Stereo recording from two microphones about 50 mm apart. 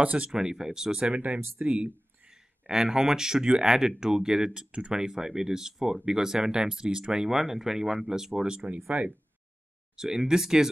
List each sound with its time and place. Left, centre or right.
0.0 s speech: right
0.3 s speech: centre
1.1 s speech: right
2.2 s speech: centre
8.7 s speech: right
9.9 s speech: centre